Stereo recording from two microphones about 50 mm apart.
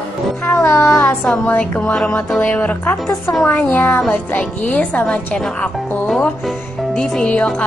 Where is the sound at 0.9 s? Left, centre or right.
Left.